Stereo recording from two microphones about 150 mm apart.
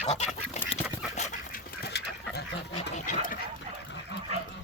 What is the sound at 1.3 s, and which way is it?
Dog, 80° left.